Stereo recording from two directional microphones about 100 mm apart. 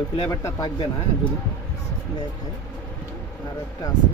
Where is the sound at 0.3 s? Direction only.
35° left (ahead or behind).